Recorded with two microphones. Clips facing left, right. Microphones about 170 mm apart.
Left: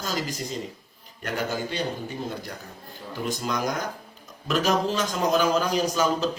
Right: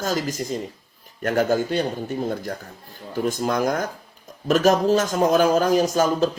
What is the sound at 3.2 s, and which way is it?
Speech, 50° right (ahead or behind).